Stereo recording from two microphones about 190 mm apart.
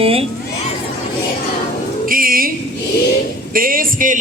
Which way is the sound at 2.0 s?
50° right (ahead or behind).